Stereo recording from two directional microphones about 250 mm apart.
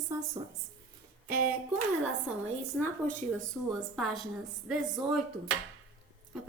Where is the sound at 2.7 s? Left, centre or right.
Centre.